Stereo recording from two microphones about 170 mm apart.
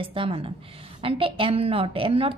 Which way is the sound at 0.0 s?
30° right (ahead or behind).